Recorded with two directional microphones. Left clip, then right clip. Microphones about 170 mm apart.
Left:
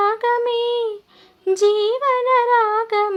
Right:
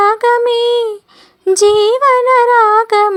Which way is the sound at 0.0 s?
25° right (ahead or behind).